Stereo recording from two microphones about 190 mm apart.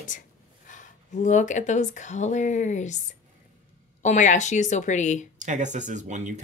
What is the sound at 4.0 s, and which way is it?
Speech, 40° left (ahead or behind).